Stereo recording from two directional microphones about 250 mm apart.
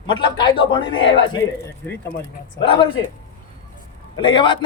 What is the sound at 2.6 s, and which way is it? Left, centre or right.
Speech, centre.